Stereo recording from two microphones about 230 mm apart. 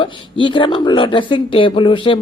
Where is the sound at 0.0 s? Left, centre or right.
Left.